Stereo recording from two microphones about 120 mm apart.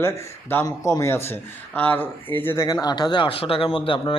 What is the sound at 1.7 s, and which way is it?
Speech, 15° left (ahead or behind).